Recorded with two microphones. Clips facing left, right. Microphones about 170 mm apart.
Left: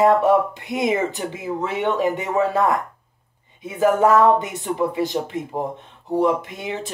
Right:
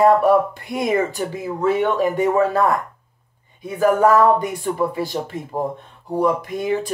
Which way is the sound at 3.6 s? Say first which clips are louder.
Right 1 dB; 20° left (ahead or behind).